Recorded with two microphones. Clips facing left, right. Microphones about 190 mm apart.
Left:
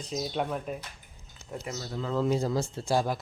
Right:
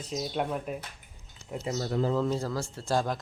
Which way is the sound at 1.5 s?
15° right (ahead or behind).